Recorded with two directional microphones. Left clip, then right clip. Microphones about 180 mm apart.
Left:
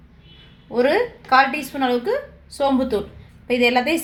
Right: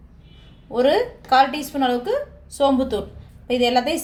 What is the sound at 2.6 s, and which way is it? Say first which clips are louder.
A woman's voice: right 1 dB; 25° left (ahead or behind).